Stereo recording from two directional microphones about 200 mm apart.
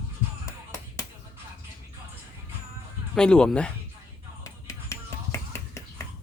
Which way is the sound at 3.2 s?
5° left (ahead or behind).